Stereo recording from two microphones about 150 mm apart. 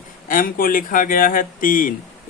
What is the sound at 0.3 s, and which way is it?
Speech, 70° left (ahead or behind).